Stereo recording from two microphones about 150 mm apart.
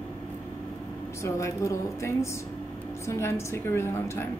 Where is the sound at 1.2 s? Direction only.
20° left (ahead or behind).